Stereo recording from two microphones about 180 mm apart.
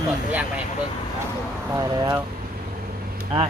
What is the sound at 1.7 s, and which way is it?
Speech, 20° right (ahead or behind).